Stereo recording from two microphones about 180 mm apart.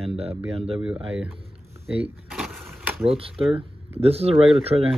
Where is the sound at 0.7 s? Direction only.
5° right (ahead or behind).